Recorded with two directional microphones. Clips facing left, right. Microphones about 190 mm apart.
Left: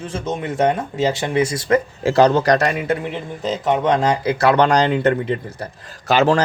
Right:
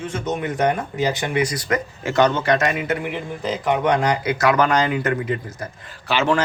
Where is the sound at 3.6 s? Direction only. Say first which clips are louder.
Left 2 dB; 25° left (ahead or behind).